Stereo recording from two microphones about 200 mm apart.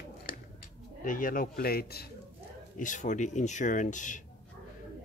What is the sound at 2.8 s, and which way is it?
Speech, 40° left (ahead or behind).